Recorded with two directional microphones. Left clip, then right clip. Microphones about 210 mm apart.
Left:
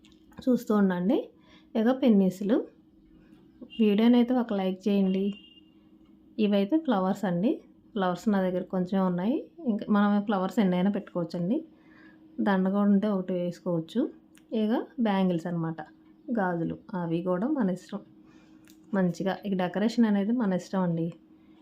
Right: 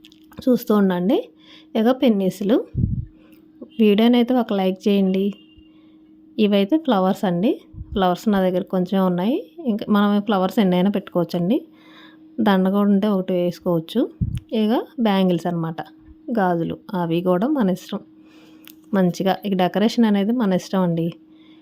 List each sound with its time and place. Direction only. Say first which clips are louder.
0.3 s a woman's voice: right 8 dB; 35° right (ahead or behind)
3.8 s a woman's voice: right 7 dB; 35° right (ahead or behind)